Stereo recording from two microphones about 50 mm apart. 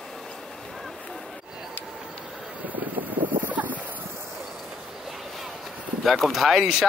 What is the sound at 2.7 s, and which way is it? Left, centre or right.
Wind noise, right.